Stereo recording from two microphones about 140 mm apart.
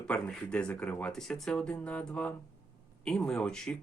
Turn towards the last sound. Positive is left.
turn(degrees=5)  # may be behind; listen again after turning